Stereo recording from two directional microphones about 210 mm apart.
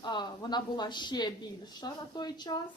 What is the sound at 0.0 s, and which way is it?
A woman's voice, 20° left (ahead or behind).